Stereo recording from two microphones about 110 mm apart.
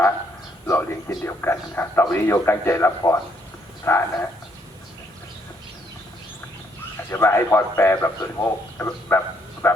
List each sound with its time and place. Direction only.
0.7 s a man's voice: 20° left (ahead or behind)
7.1 s a man's voice: 20° left (ahead or behind)